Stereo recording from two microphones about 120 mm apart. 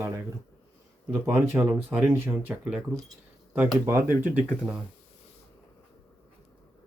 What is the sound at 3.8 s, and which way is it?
Speech, 20° right (ahead or behind).